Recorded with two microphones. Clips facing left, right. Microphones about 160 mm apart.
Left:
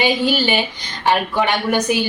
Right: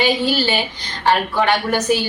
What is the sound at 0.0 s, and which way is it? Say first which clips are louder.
A woman's voice: even; 15° left (ahead or behind).